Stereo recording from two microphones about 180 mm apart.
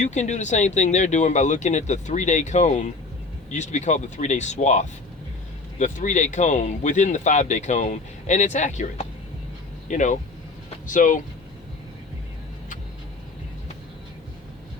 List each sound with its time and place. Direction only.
0.0 s speech: 40° left (ahead or behind)